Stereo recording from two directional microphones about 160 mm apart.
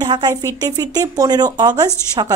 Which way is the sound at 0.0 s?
25° right (ahead or behind).